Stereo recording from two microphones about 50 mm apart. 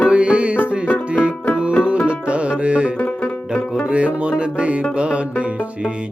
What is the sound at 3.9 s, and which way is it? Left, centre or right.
Music, right.